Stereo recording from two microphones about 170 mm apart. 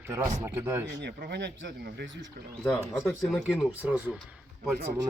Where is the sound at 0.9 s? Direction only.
85° right.